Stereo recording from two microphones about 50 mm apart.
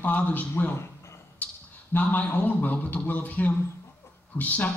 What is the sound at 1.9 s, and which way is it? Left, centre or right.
A man's voice, left.